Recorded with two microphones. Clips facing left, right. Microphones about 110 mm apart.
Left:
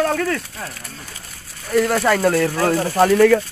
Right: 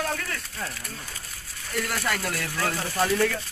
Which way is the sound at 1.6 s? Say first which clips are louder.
Left 12 dB; 75° left (ahead or behind).